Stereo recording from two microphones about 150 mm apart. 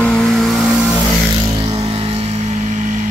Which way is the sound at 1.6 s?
40° right (ahead or behind).